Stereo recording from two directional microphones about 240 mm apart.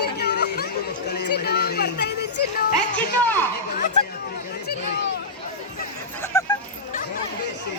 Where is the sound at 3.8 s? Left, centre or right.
Left.